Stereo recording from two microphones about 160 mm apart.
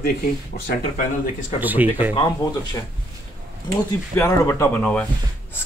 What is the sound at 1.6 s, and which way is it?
Speech, 10° right (ahead or behind).